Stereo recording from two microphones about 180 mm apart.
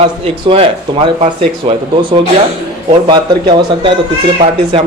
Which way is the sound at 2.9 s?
25° right (ahead or behind).